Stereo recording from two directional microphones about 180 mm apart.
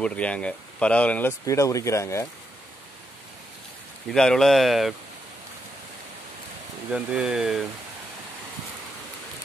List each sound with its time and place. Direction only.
0.0 s speech: 5° left (ahead or behind)
4.1 s speech: 5° left (ahead or behind)
6.9 s speech: 5° right (ahead or behind)